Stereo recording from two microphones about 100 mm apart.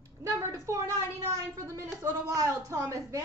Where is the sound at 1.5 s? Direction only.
35° right (ahead or behind).